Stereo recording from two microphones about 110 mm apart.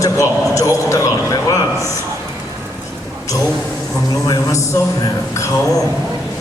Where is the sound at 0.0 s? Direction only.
30° left (ahead or behind).